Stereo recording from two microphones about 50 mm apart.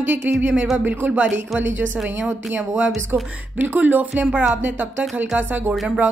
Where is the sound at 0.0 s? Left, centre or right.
Right.